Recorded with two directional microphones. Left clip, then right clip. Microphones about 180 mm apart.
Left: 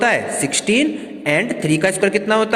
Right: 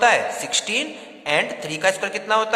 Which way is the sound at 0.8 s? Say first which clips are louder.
Left 8 dB; 15° left (ahead or behind).